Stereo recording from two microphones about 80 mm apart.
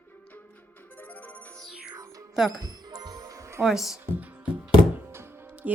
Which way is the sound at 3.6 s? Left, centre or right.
Centre.